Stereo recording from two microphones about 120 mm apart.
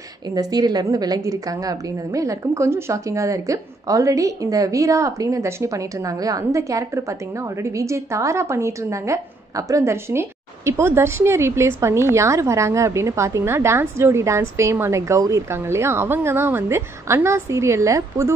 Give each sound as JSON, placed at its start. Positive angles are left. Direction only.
{"t": 0.3, "sound": "a woman's voice", "side_deg": -35}